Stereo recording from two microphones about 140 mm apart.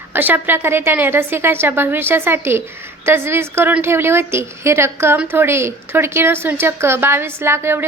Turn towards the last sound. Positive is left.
turn(degrees=-15)  # may be behind; listen again after turning